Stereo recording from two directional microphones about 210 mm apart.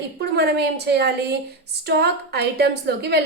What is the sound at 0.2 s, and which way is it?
A woman's voice, 50° right (ahead or behind).